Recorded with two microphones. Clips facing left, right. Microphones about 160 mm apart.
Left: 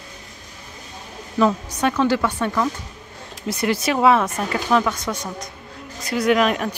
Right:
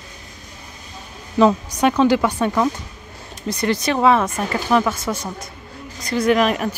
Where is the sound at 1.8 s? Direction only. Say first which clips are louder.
Right 3 dB; 15° right (ahead or behind).